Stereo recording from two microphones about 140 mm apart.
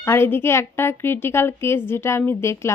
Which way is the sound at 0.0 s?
15° left (ahead or behind).